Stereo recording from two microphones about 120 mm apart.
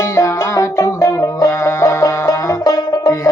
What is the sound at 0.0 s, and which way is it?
Music, 25° left (ahead or behind).